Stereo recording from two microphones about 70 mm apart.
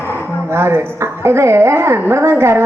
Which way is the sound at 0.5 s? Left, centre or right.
Right.